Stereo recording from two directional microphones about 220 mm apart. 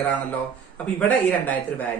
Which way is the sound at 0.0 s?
5° left (ahead or behind).